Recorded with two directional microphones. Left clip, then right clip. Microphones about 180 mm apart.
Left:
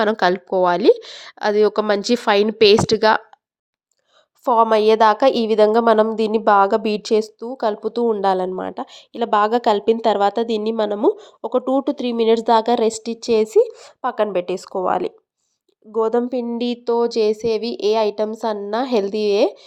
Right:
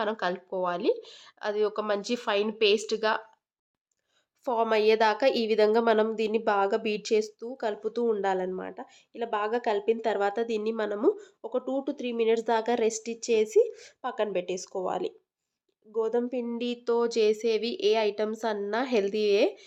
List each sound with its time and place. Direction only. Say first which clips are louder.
0.0 s a woman's voice: left 12 dB; 40° left (ahead or behind)
4.4 s a woman's voice: left 10 dB; 20° left (ahead or behind)